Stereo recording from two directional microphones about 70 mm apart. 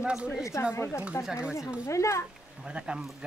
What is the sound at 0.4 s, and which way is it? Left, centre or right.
Speech, left.